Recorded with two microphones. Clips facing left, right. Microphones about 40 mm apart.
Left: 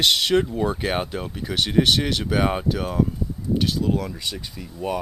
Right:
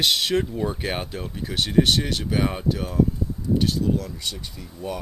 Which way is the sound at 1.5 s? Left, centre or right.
Left.